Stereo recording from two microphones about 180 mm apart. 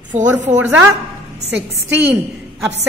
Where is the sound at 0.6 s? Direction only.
15° right (ahead or behind).